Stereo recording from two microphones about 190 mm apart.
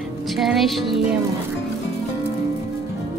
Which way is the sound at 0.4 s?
Centre (ahead or behind).